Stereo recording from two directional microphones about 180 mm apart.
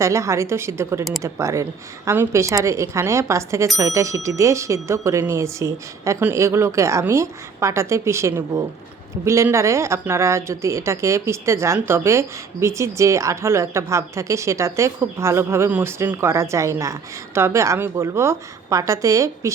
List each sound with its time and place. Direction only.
0.0 s speech: 15° right (ahead or behind)